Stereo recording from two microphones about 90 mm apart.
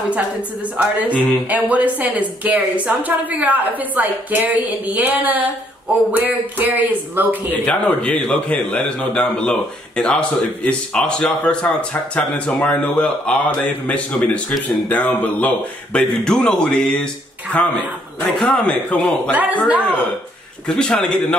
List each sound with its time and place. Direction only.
0.7 s a woman's voice: 15° right (ahead or behind)
7.5 s speech: 15° left (ahead or behind)
19.3 s a woman's voice: 20° right (ahead or behind)
20.6 s speech: 10° left (ahead or behind)